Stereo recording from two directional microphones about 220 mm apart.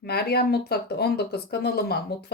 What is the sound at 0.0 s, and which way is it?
Speech, 45° left (ahead or behind).